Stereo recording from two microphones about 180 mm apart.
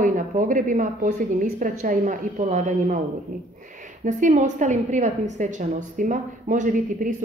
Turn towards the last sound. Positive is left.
turn(degrees=-45)  # may be behind; listen again after turning